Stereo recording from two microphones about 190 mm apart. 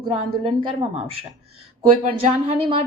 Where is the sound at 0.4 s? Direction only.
30° right (ahead or behind).